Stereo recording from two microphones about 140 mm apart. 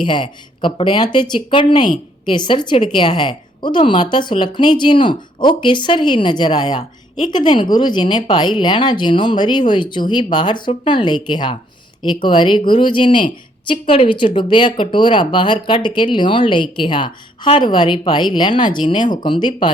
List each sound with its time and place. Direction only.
0.0 s a woman's voice: 35° left (ahead or behind)